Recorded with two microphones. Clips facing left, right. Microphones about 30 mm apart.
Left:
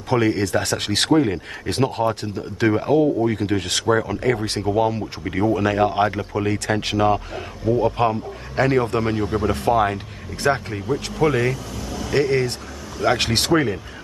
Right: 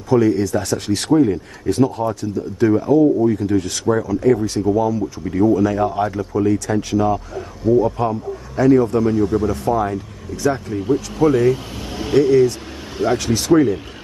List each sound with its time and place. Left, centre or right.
0.1 s speech: left
7.7 s speech: left
9.2 s speech: left
9.5 s speech: left
11.5 s vehicle: right
12.1 s speech: left